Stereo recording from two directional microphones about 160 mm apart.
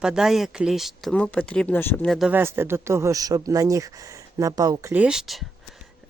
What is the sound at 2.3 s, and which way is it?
Speech, 15° right (ahead or behind).